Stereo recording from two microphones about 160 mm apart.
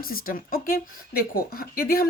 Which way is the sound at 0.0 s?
65° left (ahead or behind).